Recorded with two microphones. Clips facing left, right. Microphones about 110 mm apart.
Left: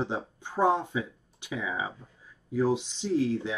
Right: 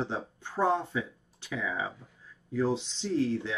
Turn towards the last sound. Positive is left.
turn(degrees=15)  # may be behind; listen again after turning